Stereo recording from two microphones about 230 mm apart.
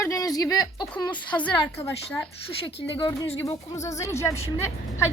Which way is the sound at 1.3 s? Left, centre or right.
Centre.